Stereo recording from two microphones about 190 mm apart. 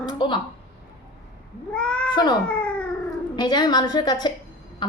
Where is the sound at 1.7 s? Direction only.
5° left (ahead or behind).